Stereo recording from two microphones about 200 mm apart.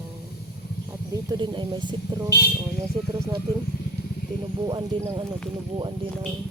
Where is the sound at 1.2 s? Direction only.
25° right (ahead or behind).